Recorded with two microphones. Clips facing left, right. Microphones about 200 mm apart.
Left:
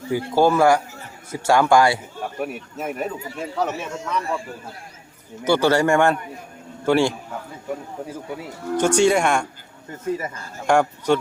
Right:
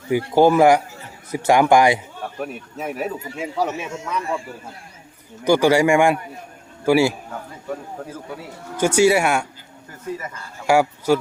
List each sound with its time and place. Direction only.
0.1 s speech: 15° right (ahead or behind)
2.4 s speech: 5° left (ahead or behind); by 4.4 s 10° right (ahead or behind)
5.5 s speech: 15° right (ahead or behind)
8.7 s speech: 10° right (ahead or behind)
10.7 s speech: 5° right (ahead or behind)